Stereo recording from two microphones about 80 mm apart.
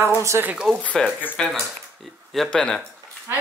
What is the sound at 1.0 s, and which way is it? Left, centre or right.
Speech, centre.